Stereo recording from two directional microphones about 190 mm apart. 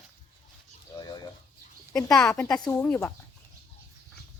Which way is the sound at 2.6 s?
20° left (ahead or behind).